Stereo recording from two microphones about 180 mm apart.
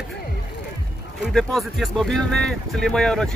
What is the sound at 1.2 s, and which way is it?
Speech, centre (ahead or behind).